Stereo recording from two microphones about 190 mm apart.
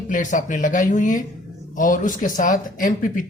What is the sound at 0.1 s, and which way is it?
Speech, 40° left (ahead or behind).